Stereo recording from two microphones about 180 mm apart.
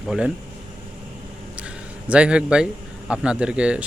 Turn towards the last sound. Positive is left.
turn(degrees=-5)  # may be behind; listen again after turning